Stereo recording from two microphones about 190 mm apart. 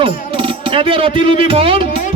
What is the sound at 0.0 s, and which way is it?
Speech, 25° right (ahead or behind).